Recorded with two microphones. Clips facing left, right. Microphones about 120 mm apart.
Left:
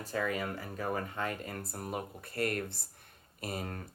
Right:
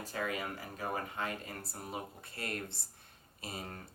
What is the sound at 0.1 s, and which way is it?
Speech, 40° left (ahead or behind).